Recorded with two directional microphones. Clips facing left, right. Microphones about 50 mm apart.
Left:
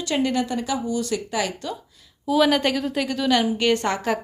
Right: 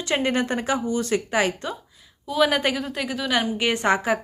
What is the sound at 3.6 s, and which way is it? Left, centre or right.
Speech, centre.